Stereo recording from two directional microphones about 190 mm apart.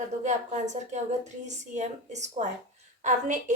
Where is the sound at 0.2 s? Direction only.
40° right (ahead or behind).